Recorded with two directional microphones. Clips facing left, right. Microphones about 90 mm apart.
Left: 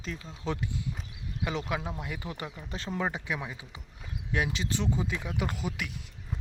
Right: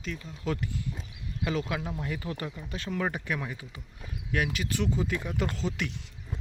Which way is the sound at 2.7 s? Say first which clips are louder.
Even; 30° left (ahead or behind).